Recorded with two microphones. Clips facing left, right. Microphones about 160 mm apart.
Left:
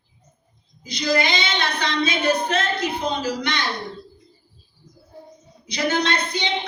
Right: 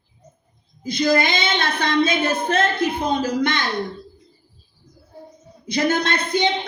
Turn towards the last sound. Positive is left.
turn(degrees=-50)  # may be behind; listen again after turning